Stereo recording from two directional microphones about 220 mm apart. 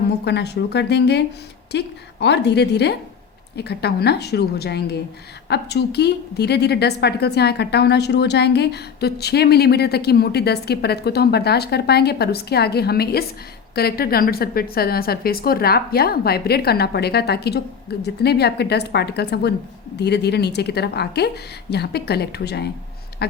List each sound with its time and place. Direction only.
0.3 s a woman's voice: 50° left (ahead or behind)